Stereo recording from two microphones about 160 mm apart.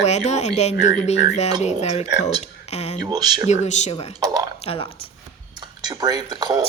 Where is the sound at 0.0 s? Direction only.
45° left (ahead or behind).